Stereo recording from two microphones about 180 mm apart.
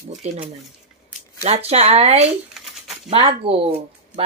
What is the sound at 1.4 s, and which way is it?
Speech, 35° right (ahead or behind).